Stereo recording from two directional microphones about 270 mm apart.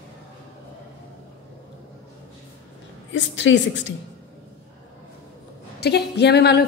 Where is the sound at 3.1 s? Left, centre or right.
Left.